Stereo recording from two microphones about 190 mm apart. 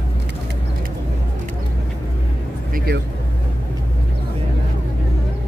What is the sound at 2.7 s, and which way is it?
Vehicle, 55° right (ahead or behind).